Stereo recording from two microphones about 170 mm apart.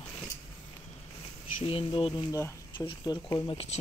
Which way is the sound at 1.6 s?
35° left (ahead or behind).